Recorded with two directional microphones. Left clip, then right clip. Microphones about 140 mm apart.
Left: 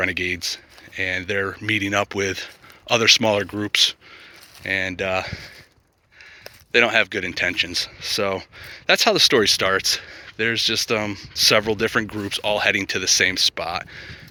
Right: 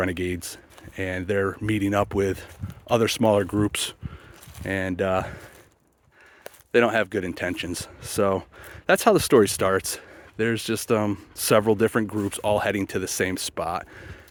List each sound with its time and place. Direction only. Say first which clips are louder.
0.1 s speech: left 6 dB; 55° right (ahead or behind)
1.2 s speech: left 1 dB; 45° right (ahead or behind)
4.6 s speech: left 3 dB; 60° right (ahead or behind)
6.7 s speech: left 3 dB; 50° right (ahead or behind)
11.9 s speech: left 2 dB; 30° right (ahead or behind)
12.3 s speech: left 5 dB; 50° right (ahead or behind)